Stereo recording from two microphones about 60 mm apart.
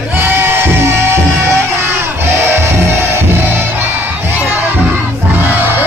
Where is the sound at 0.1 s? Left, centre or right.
Right.